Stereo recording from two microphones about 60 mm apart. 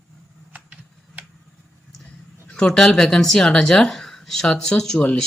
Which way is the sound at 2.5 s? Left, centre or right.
Centre.